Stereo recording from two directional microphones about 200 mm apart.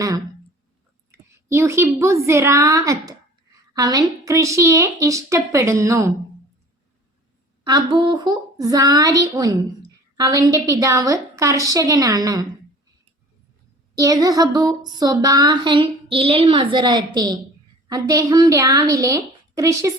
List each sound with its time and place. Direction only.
1.1 s a woman's voice: 15° right (ahead or behind)
7.6 s a woman's voice: 25° right (ahead or behind)
14.0 s a woman's voice: 15° right (ahead or behind)